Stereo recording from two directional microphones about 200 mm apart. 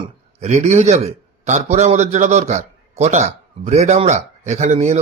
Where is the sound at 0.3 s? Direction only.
35° right (ahead or behind).